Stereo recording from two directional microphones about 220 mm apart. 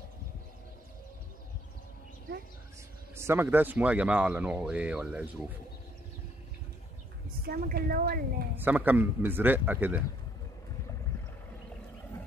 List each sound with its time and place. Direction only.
3.2 s speech: 10° right (ahead or behind)
7.4 s a woman's voice: 45° right (ahead or behind)
8.5 s speech: 10° right (ahead or behind)